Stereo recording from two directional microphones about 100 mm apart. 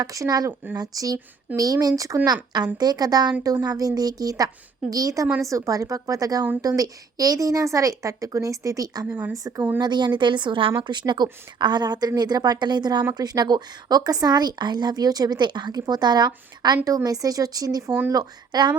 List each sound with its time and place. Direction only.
0.0 s a woman's voice: 35° right (ahead or behind)
9.0 s a woman's voice: 20° right (ahead or behind)
9.3 s speech: 35° right (ahead or behind)
9.8 s a woman's voice: 45° right (ahead or behind)